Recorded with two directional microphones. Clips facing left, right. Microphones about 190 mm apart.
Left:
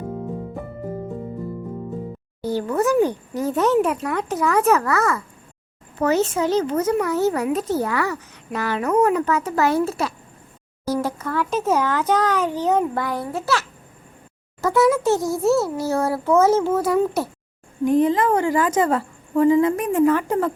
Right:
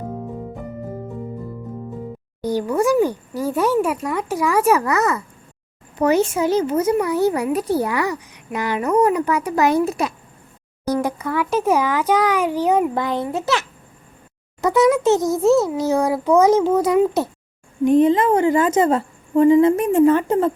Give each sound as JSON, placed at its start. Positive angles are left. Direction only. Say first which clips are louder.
{"t": 2.4, "sound": "a child's voice", "louder": "right 2 dB", "side_deg": -15}